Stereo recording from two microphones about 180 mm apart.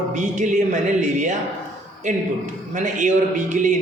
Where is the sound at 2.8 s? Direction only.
45° right (ahead or behind).